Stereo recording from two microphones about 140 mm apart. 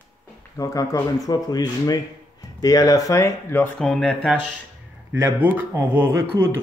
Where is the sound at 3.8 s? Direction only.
5° left (ahead or behind).